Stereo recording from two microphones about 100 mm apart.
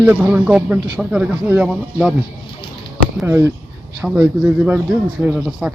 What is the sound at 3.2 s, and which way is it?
Speech, 20° right (ahead or behind).